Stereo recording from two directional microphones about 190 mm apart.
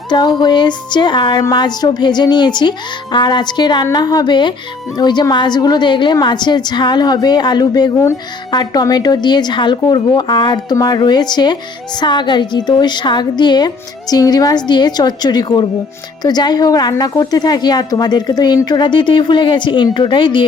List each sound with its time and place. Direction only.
0.1 s a woman's voice: 25° left (ahead or behind)